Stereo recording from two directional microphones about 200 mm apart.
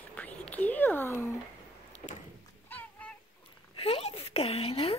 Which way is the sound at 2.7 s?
10° left (ahead or behind).